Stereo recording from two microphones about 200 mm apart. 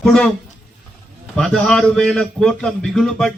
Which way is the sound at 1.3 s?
5° left (ahead or behind).